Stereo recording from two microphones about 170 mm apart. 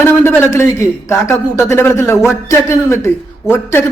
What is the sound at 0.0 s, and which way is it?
A man's voice, 15° left (ahead or behind).